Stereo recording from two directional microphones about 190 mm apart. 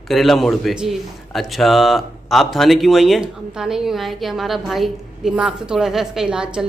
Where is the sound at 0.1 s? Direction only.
Centre (ahead or behind).